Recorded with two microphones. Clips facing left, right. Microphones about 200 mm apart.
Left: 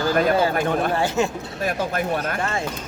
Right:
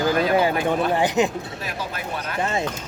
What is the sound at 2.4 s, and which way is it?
Speech, 20° right (ahead or behind).